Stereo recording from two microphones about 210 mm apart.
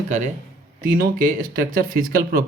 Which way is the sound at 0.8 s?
40° right (ahead or behind).